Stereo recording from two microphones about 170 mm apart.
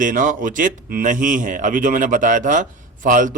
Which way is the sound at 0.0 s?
50° right (ahead or behind).